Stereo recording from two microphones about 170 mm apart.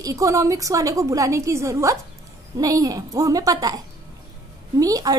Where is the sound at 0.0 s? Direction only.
20° right (ahead or behind).